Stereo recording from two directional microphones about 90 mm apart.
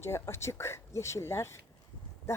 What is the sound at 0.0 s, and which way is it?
Speech, 30° left (ahead or behind).